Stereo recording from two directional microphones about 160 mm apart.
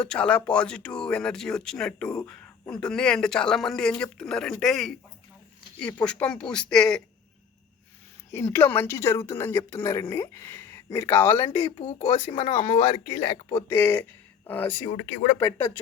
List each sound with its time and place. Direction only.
0.0 s speech: 5° left (ahead or behind)
8.5 s speech: 10° left (ahead or behind)
11.8 s speech: 35° left (ahead or behind)
13.7 s speech: 15° left (ahead or behind)